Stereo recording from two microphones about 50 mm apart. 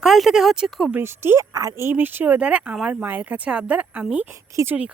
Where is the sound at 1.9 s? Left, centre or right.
Right.